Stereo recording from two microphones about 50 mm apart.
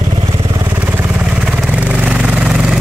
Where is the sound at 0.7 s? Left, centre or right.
Right.